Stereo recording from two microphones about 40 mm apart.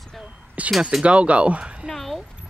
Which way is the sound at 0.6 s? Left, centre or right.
Right.